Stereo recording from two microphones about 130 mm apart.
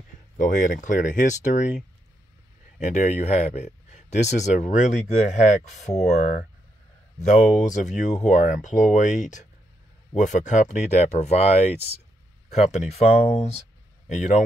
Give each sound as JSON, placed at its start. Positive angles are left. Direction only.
{"t": 0.4, "sound": "speech", "side_deg": 75}
{"t": 2.8, "sound": "speech", "side_deg": 60}